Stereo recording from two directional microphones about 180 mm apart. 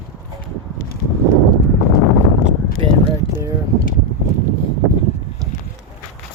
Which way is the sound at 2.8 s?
30° right (ahead or behind).